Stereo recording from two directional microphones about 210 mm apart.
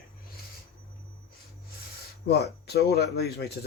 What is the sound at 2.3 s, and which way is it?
Speech, 50° left (ahead or behind).